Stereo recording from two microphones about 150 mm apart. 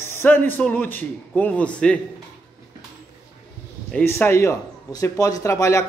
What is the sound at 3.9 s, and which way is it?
A man's voice, 10° left (ahead or behind).